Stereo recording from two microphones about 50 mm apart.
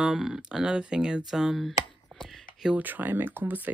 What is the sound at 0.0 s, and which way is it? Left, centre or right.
Speech, centre.